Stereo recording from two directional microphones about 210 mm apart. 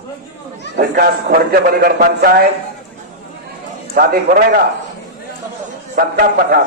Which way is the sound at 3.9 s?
45° right (ahead or behind).